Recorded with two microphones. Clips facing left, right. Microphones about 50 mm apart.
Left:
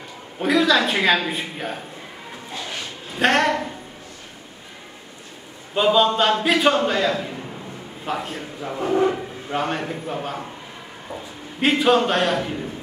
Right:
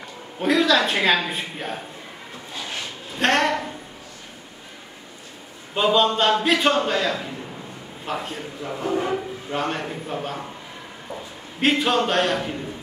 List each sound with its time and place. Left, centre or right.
0.4 s a man's voice: centre
3.2 s a man's voice: centre
5.8 s a man's voice: centre
11.6 s a man's voice: centre